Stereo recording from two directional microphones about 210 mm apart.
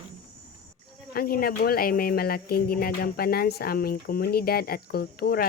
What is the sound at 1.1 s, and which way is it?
Speech, 45° left (ahead or behind).